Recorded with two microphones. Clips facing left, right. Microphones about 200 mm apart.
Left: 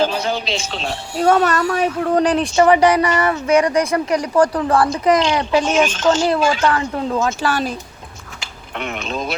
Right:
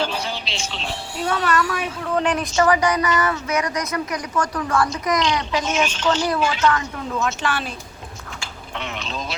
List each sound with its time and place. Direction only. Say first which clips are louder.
0.0 s a woman's voice: left 7 dB; 45° left (ahead or behind)
5.7 s a woman's voice: left 5 dB; 50° left (ahead or behind)
8.8 s a woman's voice: left 6 dB; 55° left (ahead or behind)